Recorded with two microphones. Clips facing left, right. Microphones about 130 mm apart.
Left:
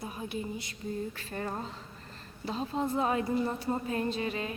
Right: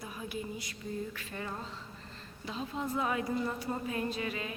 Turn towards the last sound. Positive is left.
turn(degrees=35)  # may be behind; listen again after turning